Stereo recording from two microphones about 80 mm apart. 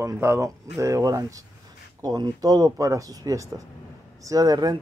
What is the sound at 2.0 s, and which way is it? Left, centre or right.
Speech, right.